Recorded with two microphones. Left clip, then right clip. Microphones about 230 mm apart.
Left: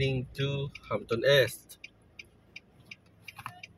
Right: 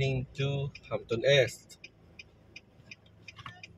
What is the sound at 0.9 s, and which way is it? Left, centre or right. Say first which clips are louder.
Speech: left 1 dB; left.